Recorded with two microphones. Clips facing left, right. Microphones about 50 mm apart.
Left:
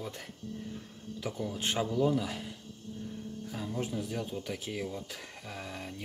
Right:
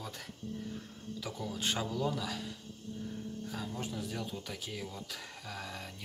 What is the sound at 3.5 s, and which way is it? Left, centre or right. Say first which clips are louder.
Speech: left 6 dB; centre.